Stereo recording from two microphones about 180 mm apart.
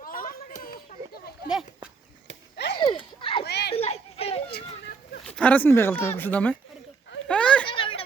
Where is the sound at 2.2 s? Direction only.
70° left (ahead or behind).